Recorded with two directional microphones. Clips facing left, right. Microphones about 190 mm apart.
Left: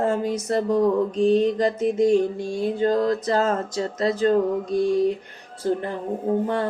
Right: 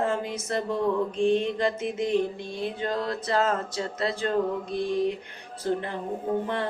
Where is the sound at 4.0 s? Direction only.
40° left (ahead or behind).